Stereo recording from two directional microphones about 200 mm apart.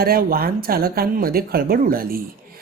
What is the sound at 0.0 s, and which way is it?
Speech, 50° right (ahead or behind).